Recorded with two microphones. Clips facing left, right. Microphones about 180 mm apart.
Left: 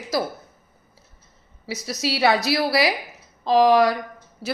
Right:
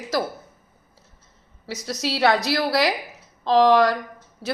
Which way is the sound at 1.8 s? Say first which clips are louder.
Even; 5° left (ahead or behind).